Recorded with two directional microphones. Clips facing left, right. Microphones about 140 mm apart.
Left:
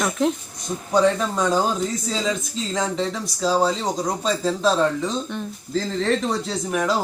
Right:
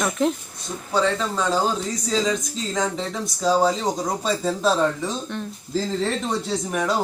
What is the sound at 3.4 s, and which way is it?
Speech, centre (ahead or behind).